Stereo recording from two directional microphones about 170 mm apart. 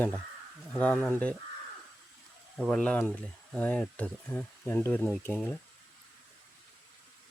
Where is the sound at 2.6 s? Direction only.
5° left (ahead or behind).